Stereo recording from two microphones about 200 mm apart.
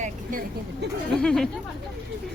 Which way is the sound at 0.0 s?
45° right (ahead or behind).